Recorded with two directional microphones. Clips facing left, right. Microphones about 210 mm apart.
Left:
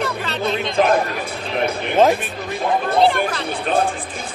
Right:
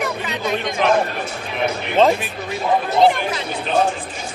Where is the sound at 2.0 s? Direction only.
Centre (ahead or behind).